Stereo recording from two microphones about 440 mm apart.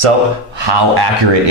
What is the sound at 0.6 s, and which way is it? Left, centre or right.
Speech, right.